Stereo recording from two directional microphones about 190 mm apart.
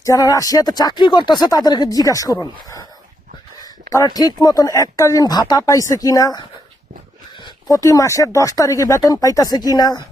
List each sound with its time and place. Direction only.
0.0 s speech: 15° left (ahead or behind)
7.4 s speech: 20° left (ahead or behind)